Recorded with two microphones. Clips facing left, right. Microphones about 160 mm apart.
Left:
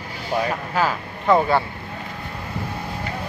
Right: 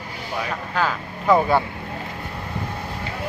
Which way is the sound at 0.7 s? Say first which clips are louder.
Left 1 dB; 5° left (ahead or behind).